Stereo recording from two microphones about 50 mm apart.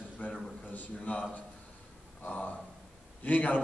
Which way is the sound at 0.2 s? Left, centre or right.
Left.